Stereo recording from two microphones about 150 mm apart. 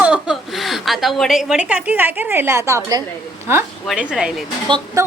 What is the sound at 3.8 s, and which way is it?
Speech, 5° right (ahead or behind).